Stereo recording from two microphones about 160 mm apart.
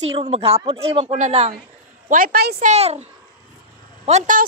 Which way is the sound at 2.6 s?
45° right (ahead or behind).